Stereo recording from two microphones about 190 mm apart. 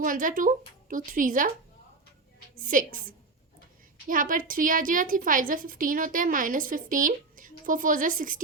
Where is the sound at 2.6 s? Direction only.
45° right (ahead or behind).